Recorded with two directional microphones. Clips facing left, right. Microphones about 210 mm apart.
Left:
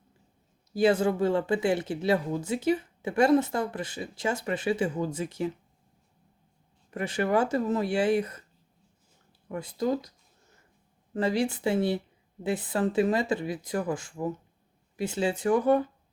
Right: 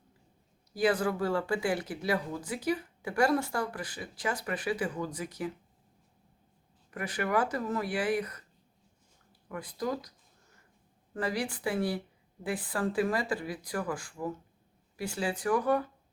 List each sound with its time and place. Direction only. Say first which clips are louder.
0.7 s speech: left 5 dB; 25° left (ahead or behind)
6.9 s speech: left 5 dB; 25° left (ahead or behind)
9.5 s speech: left 6 dB; 25° left (ahead or behind)
11.1 s speech: left 6 dB; 25° left (ahead or behind)